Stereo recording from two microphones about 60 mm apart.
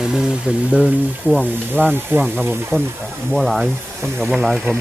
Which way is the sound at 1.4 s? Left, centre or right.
Right.